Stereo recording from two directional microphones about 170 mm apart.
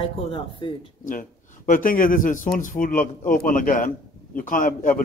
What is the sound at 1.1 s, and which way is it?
A man's voice, 50° left (ahead or behind).